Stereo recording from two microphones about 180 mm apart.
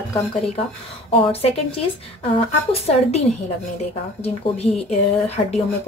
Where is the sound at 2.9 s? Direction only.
35° left (ahead or behind).